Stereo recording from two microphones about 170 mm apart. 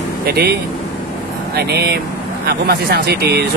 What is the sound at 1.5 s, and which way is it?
Speech, 70° right (ahead or behind).